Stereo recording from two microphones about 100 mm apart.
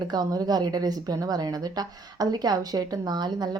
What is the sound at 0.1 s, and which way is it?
A woman's voice, 40° right (ahead or behind).